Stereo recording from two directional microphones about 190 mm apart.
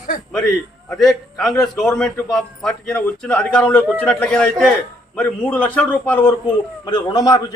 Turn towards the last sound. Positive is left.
turn(degrees=20)  # may be behind; listen again after turning